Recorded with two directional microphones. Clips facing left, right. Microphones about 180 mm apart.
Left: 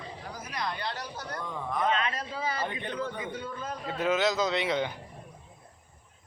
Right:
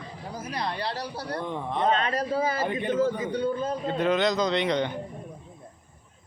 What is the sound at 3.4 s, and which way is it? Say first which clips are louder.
Speech: right 11 dB; 30° right (ahead or behind).